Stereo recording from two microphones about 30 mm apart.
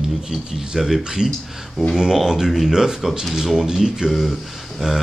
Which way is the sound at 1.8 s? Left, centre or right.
Centre.